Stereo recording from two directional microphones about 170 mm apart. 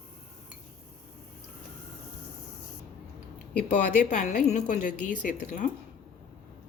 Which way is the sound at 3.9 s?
50° left (ahead or behind).